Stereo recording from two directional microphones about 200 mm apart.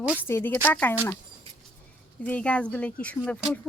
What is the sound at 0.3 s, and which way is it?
Speech, 10° left (ahead or behind).